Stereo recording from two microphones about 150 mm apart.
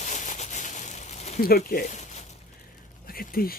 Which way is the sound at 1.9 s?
50° left (ahead or behind).